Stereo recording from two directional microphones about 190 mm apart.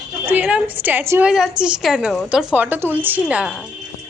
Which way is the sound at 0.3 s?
10° right (ahead or behind).